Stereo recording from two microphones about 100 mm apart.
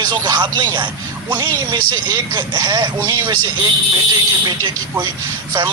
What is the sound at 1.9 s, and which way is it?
Speech, 40° right (ahead or behind).